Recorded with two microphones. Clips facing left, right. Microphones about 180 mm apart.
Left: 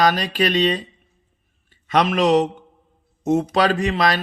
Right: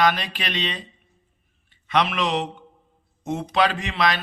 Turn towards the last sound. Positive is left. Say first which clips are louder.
# left 5 dB
turn(degrees=40)  # may be behind; listen again after turning